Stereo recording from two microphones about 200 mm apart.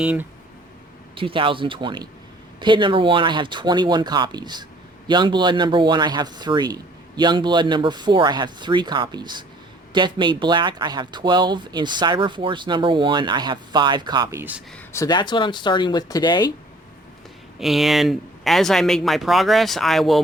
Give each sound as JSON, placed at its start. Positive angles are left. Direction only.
{"t": 0.0, "sound": "speech", "side_deg": -5}
{"t": 1.1, "sound": "speech", "side_deg": -25}
{"t": 14.9, "sound": "speech", "side_deg": 20}
{"t": 17.6, "sound": "speech", "side_deg": 0}